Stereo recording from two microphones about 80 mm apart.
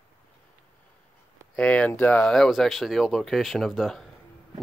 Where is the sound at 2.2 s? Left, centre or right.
Centre.